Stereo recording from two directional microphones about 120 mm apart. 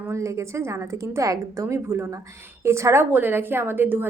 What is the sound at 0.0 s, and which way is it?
A woman's voice, 25° right (ahead or behind).